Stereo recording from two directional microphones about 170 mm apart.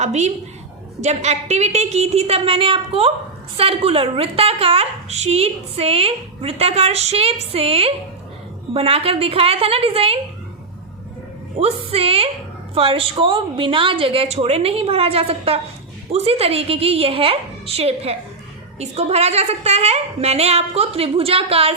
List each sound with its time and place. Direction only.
0.0 s a woman's voice: 40° right (ahead or behind)
11.6 s a woman's voice: 35° right (ahead or behind)